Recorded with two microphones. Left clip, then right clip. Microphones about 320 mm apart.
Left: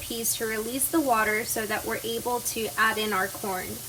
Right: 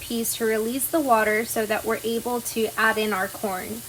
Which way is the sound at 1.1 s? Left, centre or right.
Right.